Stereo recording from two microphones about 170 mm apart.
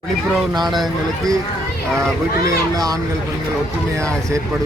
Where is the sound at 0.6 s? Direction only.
Centre (ahead or behind).